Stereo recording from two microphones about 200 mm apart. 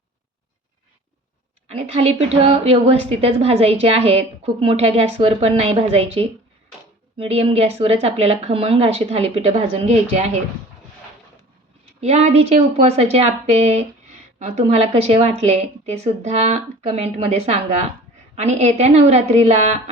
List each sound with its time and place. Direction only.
1.6 s a woman's voice: 30° right (ahead or behind)
11.9 s a woman's voice: 30° right (ahead or behind)